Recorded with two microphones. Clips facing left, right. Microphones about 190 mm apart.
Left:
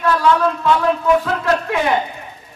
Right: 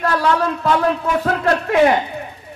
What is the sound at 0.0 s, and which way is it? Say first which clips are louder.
A man's voice: left 2 dB; 40° right (ahead or behind).